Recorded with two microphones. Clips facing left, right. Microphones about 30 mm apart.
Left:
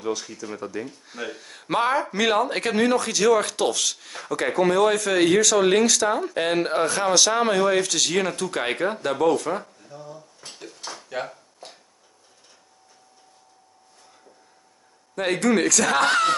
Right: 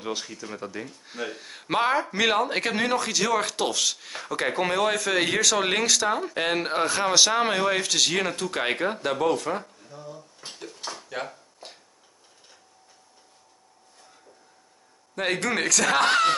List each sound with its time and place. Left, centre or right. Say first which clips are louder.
0.0 s speech: left 4 dB; right
0.6 s speech: left 4 dB; centre
10.5 s a sound: even; centre
15.1 s speech: left 4 dB; centre